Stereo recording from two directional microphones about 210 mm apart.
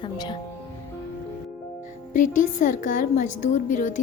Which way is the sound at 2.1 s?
40° left (ahead or behind).